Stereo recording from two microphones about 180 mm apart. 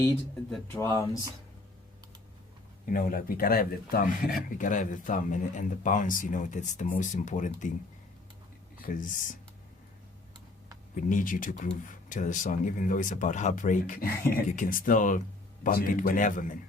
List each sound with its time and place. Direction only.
0.9 s speech: 15° left (ahead or behind)
2.8 s speech: 50° left (ahead or behind)
8.8 s speech: 50° left (ahead or behind)
10.9 s speech: 50° left (ahead or behind)